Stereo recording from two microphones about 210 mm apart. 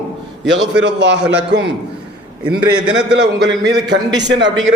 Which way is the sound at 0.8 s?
60° right (ahead or behind).